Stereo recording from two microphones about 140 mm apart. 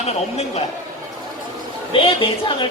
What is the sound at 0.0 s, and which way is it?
Speech, 50° left (ahead or behind).